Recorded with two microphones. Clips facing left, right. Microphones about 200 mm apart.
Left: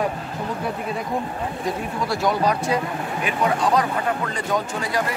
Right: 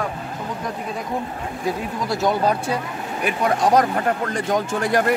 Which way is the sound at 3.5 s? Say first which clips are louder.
Right 6 dB; 45° right (ahead or behind).